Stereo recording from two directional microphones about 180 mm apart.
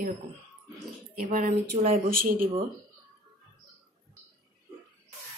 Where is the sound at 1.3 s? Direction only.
50° right (ahead or behind).